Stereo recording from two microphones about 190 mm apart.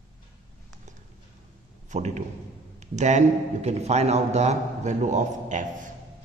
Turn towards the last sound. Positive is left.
turn(degrees=-40)  # may be behind; listen again after turning